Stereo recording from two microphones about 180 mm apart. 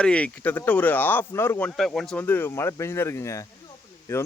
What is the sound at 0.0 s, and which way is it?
Speech, 5° left (ahead or behind).